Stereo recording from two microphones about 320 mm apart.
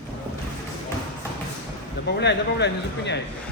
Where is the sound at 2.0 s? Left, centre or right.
Left.